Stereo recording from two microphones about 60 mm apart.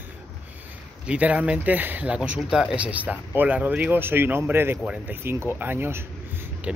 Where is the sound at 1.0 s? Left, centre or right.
Right.